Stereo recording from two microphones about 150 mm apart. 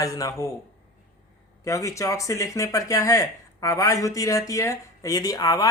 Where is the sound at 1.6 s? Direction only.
20° left (ahead or behind).